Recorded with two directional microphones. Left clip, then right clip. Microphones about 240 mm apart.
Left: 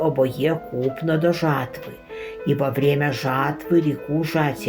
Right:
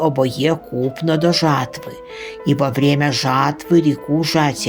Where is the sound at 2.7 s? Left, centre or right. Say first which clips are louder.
Right 3 dB; right.